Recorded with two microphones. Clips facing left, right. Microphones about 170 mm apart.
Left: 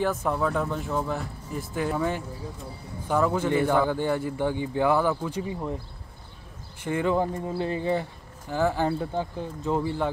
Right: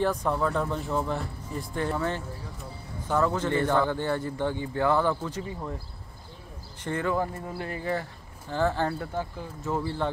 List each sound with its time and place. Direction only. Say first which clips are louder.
0.0 s a man's voice: even; 5° left (ahead or behind)
6.8 s speech: left 3 dB; 15° left (ahead or behind)
8.5 s a man's voice: left 2 dB; 10° left (ahead or behind)